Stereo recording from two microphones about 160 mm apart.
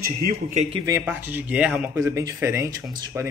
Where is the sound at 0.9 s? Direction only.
15° right (ahead or behind).